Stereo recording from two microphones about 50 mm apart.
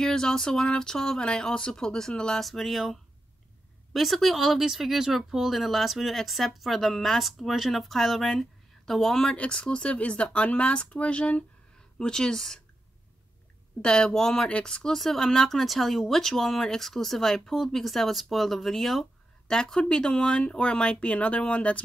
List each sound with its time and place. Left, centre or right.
0.0 s speech: centre
2.4 s speech: centre
9.2 s speech: centre
13.7 s speech: centre
19.4 s speech: centre